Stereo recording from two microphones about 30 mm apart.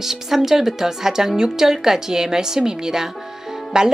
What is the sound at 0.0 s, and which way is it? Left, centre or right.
A woman's voice, centre.